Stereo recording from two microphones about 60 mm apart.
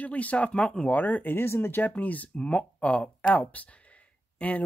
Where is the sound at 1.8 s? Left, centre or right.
Left.